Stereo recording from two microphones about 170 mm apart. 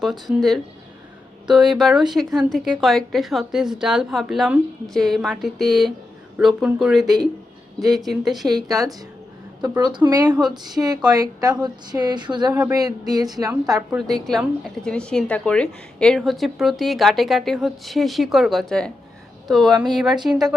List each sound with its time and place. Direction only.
0.0 s speech: centre (ahead or behind)
8.4 s a woman's voice: 25° right (ahead or behind)
13.9 s speech: centre (ahead or behind)